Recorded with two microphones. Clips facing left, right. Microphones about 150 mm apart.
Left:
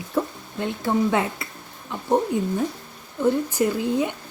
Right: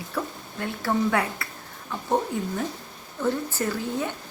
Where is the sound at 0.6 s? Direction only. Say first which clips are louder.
Left 3 dB; 20° left (ahead or behind).